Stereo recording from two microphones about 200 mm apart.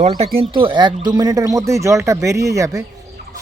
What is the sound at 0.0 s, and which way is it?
Speech, 30° right (ahead or behind).